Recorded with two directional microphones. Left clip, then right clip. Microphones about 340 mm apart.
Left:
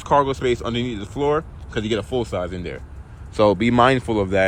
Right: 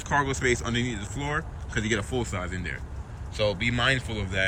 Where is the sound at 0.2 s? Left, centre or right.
Centre.